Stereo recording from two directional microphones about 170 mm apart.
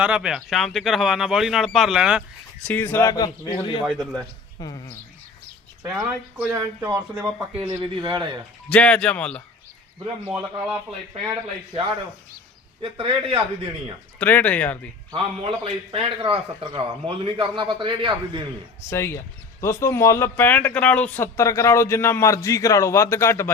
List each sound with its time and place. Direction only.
0.0 s speech: 5° right (ahead or behind)
2.6 s speech: 10° left (ahead or behind); by 3.8 s 30° left (ahead or behind)
3.8 s speech: 5° right (ahead or behind)
4.6 s speech: 20° left (ahead or behind)
6.5 s speech: 15° right (ahead or behind)
7.5 s speech: 30° right (ahead or behind)
8.7 s speech: 5° left (ahead or behind)
12.8 s a man's voice: 30° right (ahead or behind)
14.2 s speech: 10° left (ahead or behind)
15.1 s a man's voice: 30° right (ahead or behind)
18.9 s speech: 15° left (ahead or behind)